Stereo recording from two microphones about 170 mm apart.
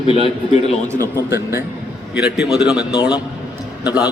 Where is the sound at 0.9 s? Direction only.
15° right (ahead or behind).